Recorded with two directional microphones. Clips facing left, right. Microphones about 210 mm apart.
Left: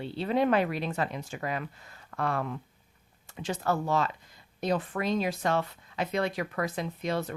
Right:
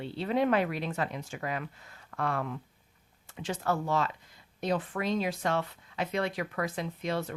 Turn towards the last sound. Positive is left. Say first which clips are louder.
# left 2 dB
turn(degrees=40)  # may be behind; listen again after turning